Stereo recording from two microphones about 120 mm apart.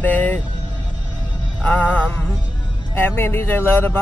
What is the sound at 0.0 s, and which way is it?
Vehicle, 15° left (ahead or behind).